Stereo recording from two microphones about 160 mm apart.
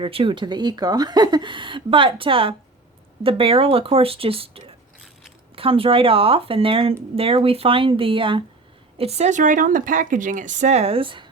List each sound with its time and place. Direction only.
0.0 s speech: 35° right (ahead or behind)